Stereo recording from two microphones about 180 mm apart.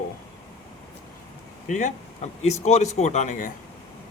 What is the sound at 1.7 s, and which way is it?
A man's voice, 45° left (ahead or behind).